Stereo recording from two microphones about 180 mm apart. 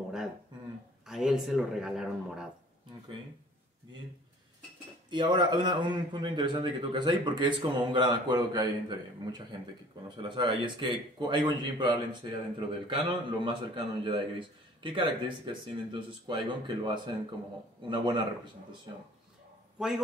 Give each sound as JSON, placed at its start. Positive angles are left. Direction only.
{"t": 1.0, "sound": "speech", "side_deg": 0}
{"t": 5.1, "sound": "speech", "side_deg": -25}